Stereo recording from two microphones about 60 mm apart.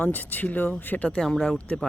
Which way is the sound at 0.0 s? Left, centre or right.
Left.